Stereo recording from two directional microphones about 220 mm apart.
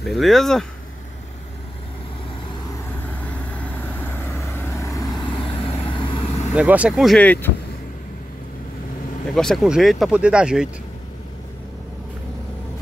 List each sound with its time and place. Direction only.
0.0 s speech: centre (ahead or behind)
3.8 s vehicle: 10° left (ahead or behind)
6.5 s speech: 5° right (ahead or behind)
9.3 s speech: centre (ahead or behind)